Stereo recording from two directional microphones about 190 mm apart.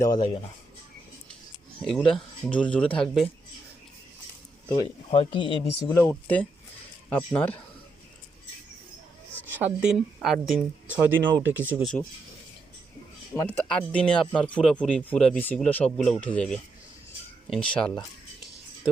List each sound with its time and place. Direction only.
0.0 s speech: 20° left (ahead or behind)
1.8 s speech: centre (ahead or behind)
4.7 s speech: 25° left (ahead or behind)
6.0 s speech: 5° left (ahead or behind)
9.5 s speech: 5° right (ahead or behind)
11.7 s speech: centre (ahead or behind)
13.3 s speech: 10° left (ahead or behind)